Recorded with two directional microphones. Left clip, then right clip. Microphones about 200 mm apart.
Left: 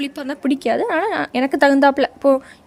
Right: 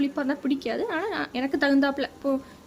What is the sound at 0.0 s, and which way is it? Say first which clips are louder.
A woman's voice: left 3 dB; 45° left (ahead or behind).